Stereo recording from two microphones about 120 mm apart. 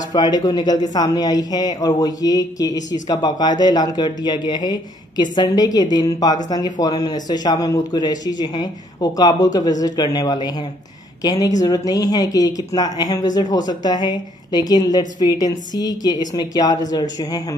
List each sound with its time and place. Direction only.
0.1 s speech: 35° left (ahead or behind)